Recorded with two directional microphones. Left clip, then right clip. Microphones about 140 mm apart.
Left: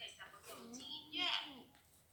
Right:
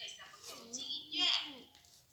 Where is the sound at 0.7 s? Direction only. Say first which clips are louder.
Right 7 dB; 15° right (ahead or behind).